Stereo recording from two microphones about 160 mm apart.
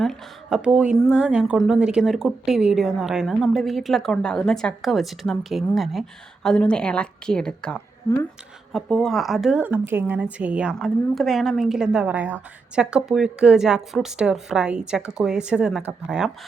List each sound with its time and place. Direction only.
0.0 s speech: centre (ahead or behind)
8.1 s speech: 20° left (ahead or behind)
8.7 s speech: 5° left (ahead or behind)